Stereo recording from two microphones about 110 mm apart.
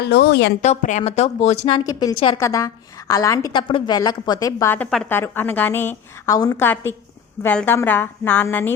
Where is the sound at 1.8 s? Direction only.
35° left (ahead or behind).